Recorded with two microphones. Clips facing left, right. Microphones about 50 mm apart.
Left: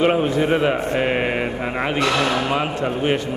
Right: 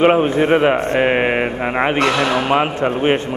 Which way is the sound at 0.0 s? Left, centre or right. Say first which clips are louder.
Right 4 dB; right.